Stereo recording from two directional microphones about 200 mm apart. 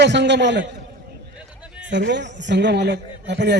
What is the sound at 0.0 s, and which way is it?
Speech, 60° right (ahead or behind).